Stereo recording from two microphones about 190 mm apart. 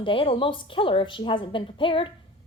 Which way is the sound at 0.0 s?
30° left (ahead or behind).